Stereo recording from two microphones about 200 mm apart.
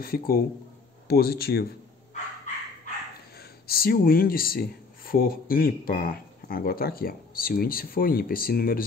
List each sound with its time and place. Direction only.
0.0 s speech: 45° left (ahead or behind)
3.3 s speech: 50° left (ahead or behind)